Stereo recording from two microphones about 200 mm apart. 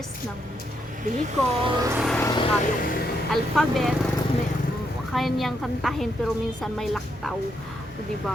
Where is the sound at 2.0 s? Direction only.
Centre (ahead or behind).